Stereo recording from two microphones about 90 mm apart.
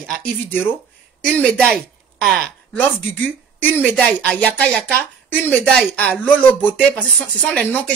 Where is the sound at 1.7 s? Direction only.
Centre (ahead or behind).